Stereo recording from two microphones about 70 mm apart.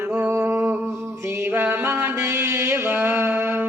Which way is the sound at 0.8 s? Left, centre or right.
Right.